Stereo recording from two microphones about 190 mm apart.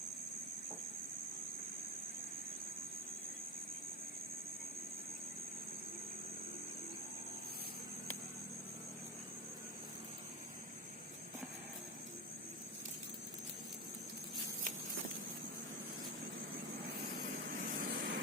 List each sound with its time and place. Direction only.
17.5 s vehicle: 50° right (ahead or behind)